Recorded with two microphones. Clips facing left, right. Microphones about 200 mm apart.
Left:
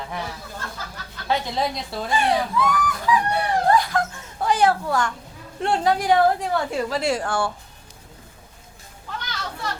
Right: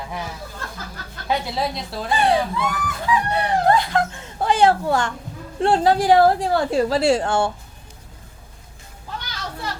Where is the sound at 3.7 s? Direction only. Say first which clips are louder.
Left 2 dB; 25° right (ahead or behind).